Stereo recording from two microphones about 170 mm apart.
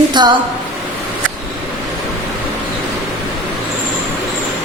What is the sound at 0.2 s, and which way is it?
Speech, 25° right (ahead or behind).